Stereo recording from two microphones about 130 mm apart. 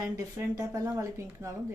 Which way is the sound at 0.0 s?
20° right (ahead or behind).